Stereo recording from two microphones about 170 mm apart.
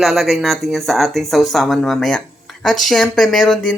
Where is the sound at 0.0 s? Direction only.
Centre (ahead or behind).